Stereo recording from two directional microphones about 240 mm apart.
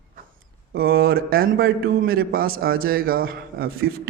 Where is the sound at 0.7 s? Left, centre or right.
Right.